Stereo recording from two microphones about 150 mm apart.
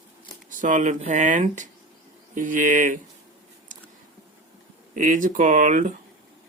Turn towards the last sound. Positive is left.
turn(degrees=-55)  # may be behind; listen again after turning